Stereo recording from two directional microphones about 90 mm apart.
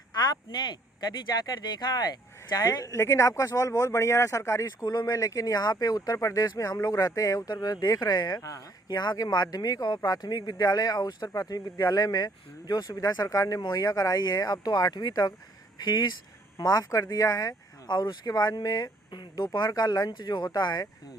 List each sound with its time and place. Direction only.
0.2 s a sound: 55° left (ahead or behind)
1.5 s speech: 45° left (ahead or behind)
16.6 s speech: 45° left (ahead or behind)